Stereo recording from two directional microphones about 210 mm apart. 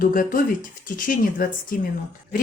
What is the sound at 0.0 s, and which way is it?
A woman's voice, 40° left (ahead or behind).